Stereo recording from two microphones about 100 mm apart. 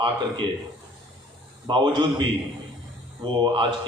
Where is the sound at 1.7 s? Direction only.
50° right (ahead or behind).